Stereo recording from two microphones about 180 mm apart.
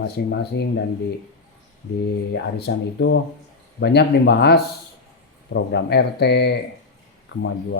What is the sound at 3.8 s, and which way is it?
Speech, 70° left (ahead or behind).